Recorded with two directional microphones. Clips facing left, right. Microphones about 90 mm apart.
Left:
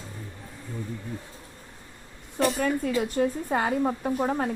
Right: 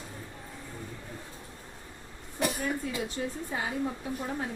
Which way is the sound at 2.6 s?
65° left (ahead or behind).